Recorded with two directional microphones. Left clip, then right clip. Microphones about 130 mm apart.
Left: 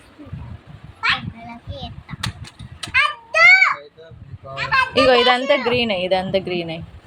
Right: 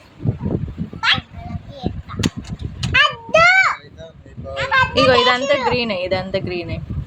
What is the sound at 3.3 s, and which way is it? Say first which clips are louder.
Children playing: left 1 dB; 35° right (ahead or behind).